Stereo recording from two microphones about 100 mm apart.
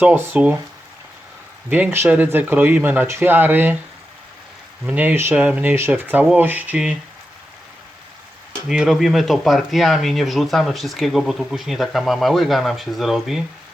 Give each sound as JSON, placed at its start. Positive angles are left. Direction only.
{"t": 0.0, "sound": "speech", "side_deg": -20}
{"t": 1.7, "sound": "speech", "side_deg": -20}
{"t": 4.9, "sound": "speech", "side_deg": -15}
{"t": 8.6, "sound": "speech", "side_deg": -5}